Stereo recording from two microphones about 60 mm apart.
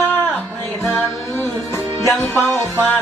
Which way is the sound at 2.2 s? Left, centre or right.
Left.